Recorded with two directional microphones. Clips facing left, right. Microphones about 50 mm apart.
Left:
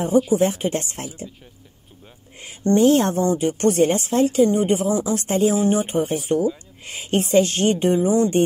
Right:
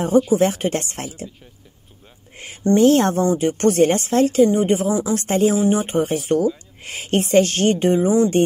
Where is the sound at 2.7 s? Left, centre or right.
Right.